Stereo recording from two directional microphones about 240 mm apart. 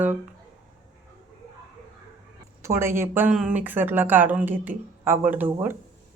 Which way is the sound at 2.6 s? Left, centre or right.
Centre.